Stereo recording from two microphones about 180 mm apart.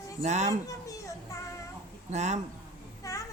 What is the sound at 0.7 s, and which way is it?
Children playing, 20° left (ahead or behind).